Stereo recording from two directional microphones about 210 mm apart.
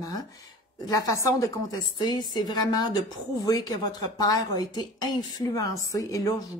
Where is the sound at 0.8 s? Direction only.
15° left (ahead or behind).